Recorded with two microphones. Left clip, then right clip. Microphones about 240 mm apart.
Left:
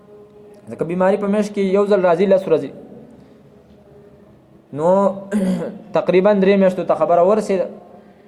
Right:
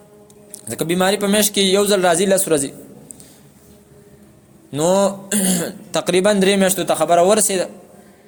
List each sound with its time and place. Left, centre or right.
0.7 s speech: right
1.5 s a man's voice: right
4.7 s speech: right
5.9 s a man's voice: right
7.4 s a man's voice: right